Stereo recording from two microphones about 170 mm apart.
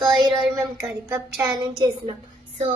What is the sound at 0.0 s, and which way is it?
Child singing, 20° right (ahead or behind).